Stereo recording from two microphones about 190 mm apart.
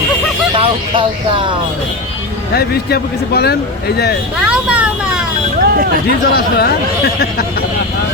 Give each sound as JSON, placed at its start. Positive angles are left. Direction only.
{"t": 0.5, "sound": "speech", "side_deg": -25}
{"t": 2.5, "sound": "speech", "side_deg": 55}
{"t": 4.4, "sound": "vehicle", "side_deg": -5}
{"t": 6.1, "sound": "speech", "side_deg": 55}